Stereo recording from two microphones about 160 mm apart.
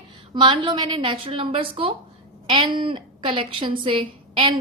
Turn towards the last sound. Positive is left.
turn(degrees=-30)  # may be behind; listen again after turning